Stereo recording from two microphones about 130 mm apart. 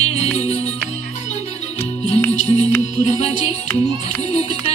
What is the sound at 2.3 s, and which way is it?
Music, 60° left (ahead or behind).